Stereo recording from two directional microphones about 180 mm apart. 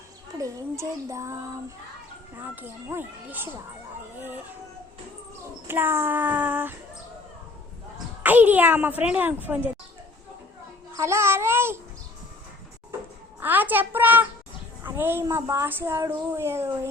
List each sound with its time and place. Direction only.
0.3 s speech: 20° right (ahead or behind)
5.6 s speech: 10° right (ahead or behind)
8.2 s speech: 10° right (ahead or behind)
10.9 s speech: 15° right (ahead or behind)
13.4 s speech: 10° right (ahead or behind)